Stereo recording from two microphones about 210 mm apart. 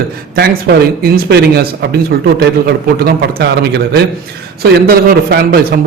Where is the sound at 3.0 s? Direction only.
50° right (ahead or behind).